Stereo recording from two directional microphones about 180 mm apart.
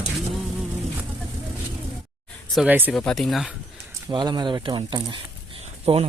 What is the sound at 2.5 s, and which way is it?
Speech, 10° right (ahead or behind).